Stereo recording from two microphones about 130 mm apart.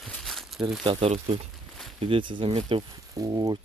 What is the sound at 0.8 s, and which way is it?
Speech, 45° right (ahead or behind).